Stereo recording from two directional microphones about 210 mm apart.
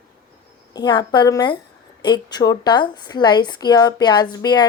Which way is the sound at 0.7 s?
20° left (ahead or behind).